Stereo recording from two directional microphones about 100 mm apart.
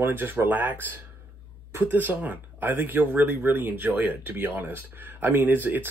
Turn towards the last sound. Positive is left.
turn(degrees=-20)  # may be behind; listen again after turning